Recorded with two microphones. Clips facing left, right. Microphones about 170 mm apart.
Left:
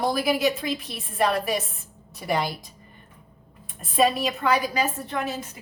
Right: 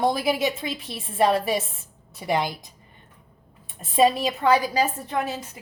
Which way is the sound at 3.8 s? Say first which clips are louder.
Right 2 dB; 30° right (ahead or behind).